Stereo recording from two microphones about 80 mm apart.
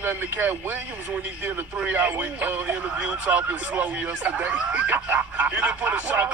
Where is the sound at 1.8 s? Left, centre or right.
Centre.